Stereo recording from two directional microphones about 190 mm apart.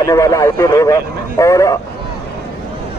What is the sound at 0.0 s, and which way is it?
Speech, 15° left (ahead or behind).